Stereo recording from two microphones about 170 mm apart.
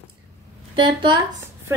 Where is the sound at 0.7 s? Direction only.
30° right (ahead or behind).